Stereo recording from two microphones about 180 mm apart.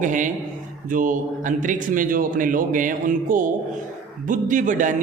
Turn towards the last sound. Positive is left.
turn(degrees=-45)  # may be behind; listen again after turning